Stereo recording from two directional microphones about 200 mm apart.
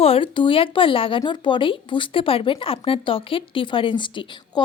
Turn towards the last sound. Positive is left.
turn(degrees=25)  # may be behind; listen again after turning